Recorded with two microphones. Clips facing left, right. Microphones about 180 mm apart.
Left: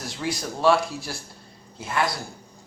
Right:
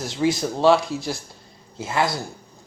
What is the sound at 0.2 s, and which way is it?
Speech, 20° right (ahead or behind).